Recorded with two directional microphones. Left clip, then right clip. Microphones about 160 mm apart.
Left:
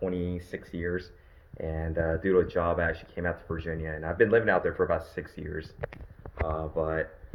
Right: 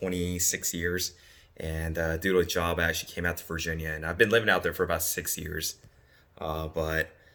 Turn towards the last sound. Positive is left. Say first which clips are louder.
# even
turn(degrees=-45)  # may be behind; listen again after turning